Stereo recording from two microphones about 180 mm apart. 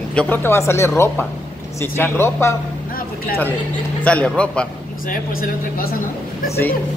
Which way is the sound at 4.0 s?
5° left (ahead or behind).